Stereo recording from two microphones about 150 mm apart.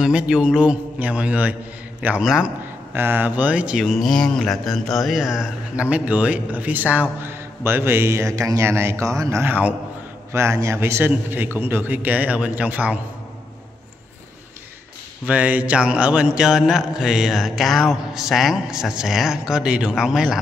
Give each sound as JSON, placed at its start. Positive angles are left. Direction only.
{"t": 0.0, "sound": "a man's voice", "side_deg": -5}
{"t": 15.2, "sound": "mantra", "side_deg": -10}